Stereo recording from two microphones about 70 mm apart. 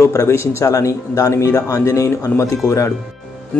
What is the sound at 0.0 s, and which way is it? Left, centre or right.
Speech, left.